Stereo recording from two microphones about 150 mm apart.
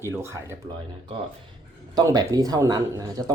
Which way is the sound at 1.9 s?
25° right (ahead or behind).